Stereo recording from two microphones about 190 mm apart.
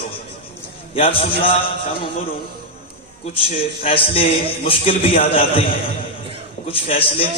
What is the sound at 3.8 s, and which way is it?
Speech, 30° left (ahead or behind).